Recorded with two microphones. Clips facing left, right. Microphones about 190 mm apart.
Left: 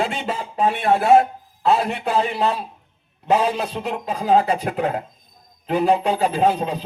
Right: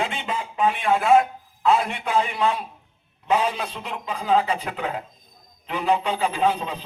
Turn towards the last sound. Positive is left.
turn(degrees=40)  # may be behind; listen again after turning